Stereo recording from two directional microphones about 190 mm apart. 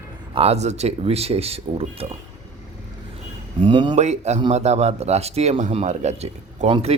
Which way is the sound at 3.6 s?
25° right (ahead or behind).